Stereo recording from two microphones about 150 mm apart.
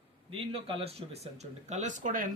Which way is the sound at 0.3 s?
35° right (ahead or behind).